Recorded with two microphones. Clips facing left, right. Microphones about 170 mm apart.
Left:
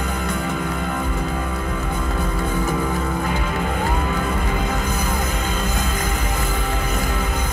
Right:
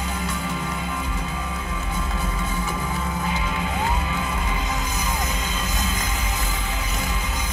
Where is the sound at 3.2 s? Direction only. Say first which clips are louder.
Left 4 dB; 50° left (ahead or behind).